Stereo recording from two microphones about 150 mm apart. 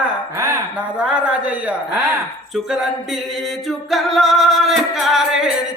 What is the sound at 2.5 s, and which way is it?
Music, centre (ahead or behind).